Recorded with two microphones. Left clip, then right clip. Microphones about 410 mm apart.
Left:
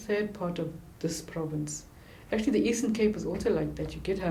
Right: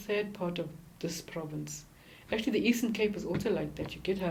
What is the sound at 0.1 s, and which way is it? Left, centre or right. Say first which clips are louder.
A woman's voice: left 2 dB; right.